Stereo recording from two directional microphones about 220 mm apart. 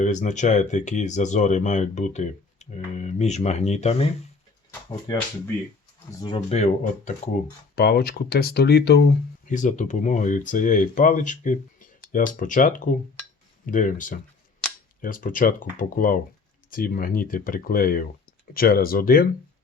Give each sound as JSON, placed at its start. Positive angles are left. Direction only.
{"t": 0.0, "sound": "speech", "side_deg": 35}
{"t": 6.2, "sound": "speech", "side_deg": 25}
{"t": 7.8, "sound": "speech", "side_deg": 45}
{"t": 9.5, "sound": "speech", "side_deg": 35}
{"t": 14.6, "sound": "camera", "side_deg": 5}
{"t": 15.0, "sound": "speech", "side_deg": 40}